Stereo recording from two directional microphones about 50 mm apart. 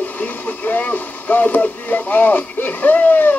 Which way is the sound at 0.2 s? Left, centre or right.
Left.